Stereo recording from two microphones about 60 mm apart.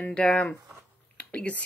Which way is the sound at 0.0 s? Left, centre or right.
Left.